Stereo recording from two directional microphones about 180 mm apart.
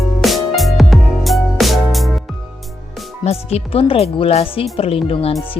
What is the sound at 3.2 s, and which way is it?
Speech, 35° left (ahead or behind).